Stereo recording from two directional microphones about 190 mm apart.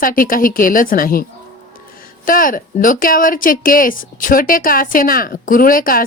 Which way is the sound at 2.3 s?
45° left (ahead or behind).